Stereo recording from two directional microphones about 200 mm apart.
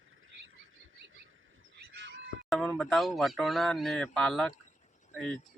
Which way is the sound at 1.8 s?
60° right (ahead or behind).